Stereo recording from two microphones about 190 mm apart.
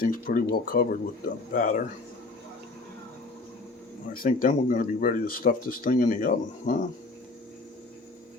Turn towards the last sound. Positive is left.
turn(degrees=45)  # may be behind; listen again after turning